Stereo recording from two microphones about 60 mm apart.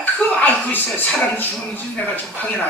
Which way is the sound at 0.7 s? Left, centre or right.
Left.